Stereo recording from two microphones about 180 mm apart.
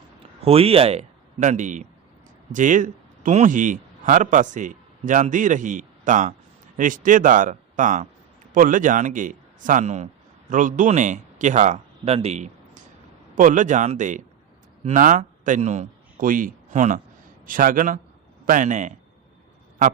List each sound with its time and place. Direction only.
0.4 s a man's voice: 30° right (ahead or behind)